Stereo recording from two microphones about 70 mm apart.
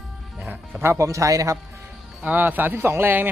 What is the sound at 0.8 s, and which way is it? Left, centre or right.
Speech, right.